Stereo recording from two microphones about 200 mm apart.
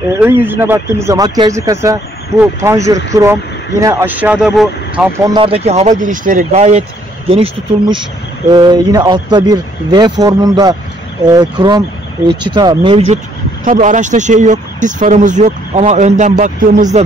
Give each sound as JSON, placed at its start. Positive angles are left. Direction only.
{"t": 0.1, "sound": "speech", "side_deg": -10}
{"t": 5.2, "sound": "speech", "side_deg": -25}
{"t": 8.5, "sound": "speech", "side_deg": -20}
{"t": 13.7, "sound": "speech", "side_deg": -40}